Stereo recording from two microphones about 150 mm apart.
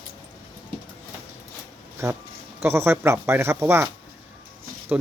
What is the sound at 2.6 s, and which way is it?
Speech, 15° right (ahead or behind).